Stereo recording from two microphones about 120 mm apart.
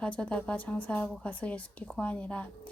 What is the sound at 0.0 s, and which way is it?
A woman's voice, 10° left (ahead or behind).